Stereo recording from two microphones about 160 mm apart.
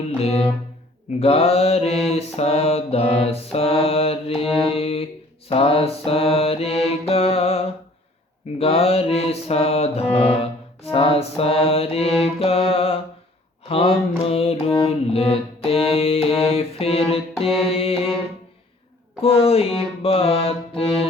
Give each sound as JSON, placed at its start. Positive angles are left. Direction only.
{"t": 0.2, "sound": "music", "side_deg": 40}
{"t": 2.0, "sound": "mantra", "side_deg": 40}
{"t": 8.5, "sound": "music", "side_deg": 40}
{"t": 12.4, "sound": "mantra", "side_deg": 35}
{"t": 14.3, "sound": "music", "side_deg": 40}
{"t": 19.2, "sound": "music", "side_deg": 35}